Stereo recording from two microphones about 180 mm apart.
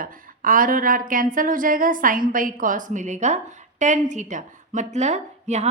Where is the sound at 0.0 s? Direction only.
50° right (ahead or behind).